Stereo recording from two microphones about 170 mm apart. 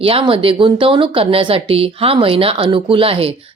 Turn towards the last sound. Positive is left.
turn(degrees=-30)  # may be behind; listen again after turning